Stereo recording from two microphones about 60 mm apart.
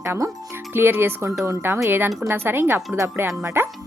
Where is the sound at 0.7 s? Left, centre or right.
Right.